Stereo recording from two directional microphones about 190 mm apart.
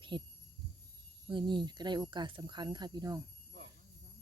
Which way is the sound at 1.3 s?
25° right (ahead or behind).